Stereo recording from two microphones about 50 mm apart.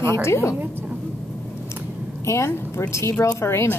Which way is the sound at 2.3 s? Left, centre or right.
Left.